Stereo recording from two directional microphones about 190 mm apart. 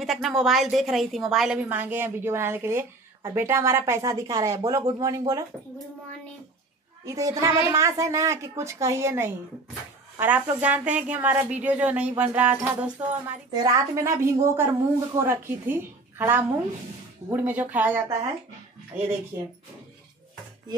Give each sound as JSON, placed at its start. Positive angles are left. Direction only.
{"t": 0.0, "sound": "a woman's voice", "side_deg": 0}
{"t": 7.1, "sound": "a woman's voice", "side_deg": -15}
{"t": 13.5, "sound": "a woman's voice", "side_deg": -20}
{"t": 19.3, "sound": "a woman's voice", "side_deg": -15}